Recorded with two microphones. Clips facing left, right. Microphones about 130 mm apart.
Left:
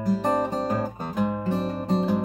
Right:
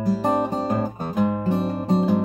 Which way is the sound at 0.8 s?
25° right (ahead or behind).